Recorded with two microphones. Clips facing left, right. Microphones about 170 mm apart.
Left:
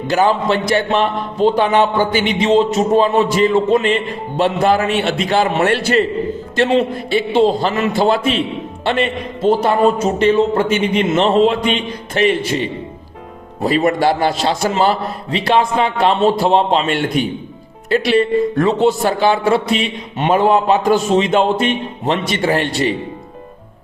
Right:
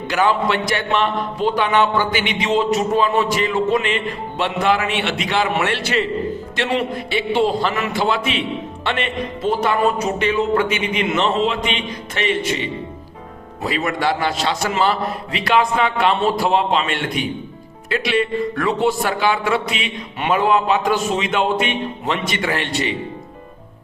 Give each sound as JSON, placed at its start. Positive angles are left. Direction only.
{"t": 0.1, "sound": "speech", "side_deg": 35}
{"t": 7.3, "sound": "speech", "side_deg": 30}
{"t": 13.7, "sound": "speech", "side_deg": 40}
{"t": 18.5, "sound": "speech", "side_deg": 25}
{"t": 22.5, "sound": "speech", "side_deg": 40}